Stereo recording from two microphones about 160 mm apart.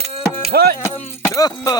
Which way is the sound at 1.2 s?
20° left (ahead or behind).